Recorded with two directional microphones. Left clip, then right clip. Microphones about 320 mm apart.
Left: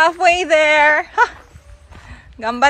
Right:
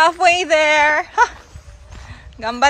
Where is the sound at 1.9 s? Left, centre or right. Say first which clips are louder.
Even; centre.